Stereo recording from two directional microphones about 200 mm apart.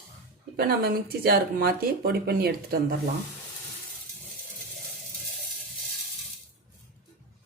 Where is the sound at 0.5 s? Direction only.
50° right (ahead or behind).